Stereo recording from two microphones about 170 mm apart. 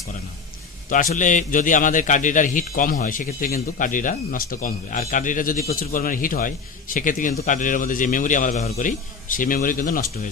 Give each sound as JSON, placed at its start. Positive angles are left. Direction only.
{"t": 0.9, "sound": "a man's voice", "side_deg": 50}